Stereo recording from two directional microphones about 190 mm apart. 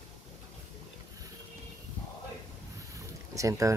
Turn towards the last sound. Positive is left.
turn(degrees=-15)  # may be behind; listen again after turning